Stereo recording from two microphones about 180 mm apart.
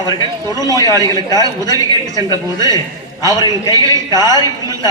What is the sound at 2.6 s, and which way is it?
A man's voice, 20° left (ahead or behind).